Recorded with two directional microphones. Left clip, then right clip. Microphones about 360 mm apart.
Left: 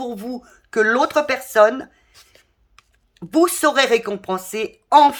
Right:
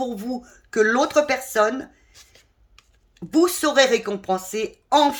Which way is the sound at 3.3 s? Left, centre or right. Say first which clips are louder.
Left 3 dB; centre.